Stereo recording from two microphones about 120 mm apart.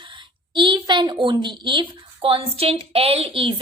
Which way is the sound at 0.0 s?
45° right (ahead or behind).